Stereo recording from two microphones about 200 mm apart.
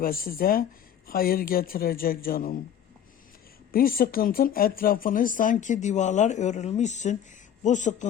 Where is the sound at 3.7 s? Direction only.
45° left (ahead or behind).